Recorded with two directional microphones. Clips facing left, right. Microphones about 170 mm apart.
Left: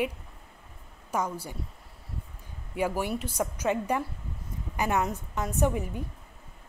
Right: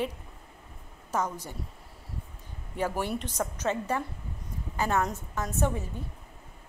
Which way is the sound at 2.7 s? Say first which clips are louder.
Left 1 dB; 10° left (ahead or behind).